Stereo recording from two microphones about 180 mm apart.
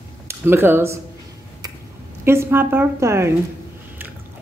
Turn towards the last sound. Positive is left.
turn(degrees=-15)  # may be behind; listen again after turning